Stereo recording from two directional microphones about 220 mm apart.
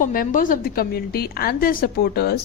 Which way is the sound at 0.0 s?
40° left (ahead or behind).